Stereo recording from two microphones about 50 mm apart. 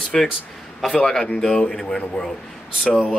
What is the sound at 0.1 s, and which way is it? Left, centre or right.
Speech, centre.